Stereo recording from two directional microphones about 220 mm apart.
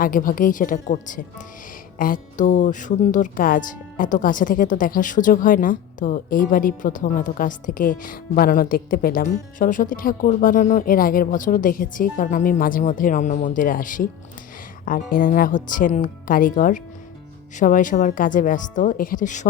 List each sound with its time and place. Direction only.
0.0 s speech: 40° left (ahead or behind)